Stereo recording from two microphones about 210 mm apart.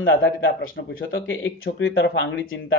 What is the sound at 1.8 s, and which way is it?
Speech, 60° left (ahead or behind).